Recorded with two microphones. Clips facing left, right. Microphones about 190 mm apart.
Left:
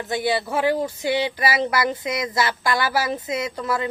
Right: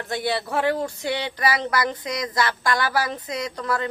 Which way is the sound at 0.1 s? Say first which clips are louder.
Left 2 dB; centre (ahead or behind).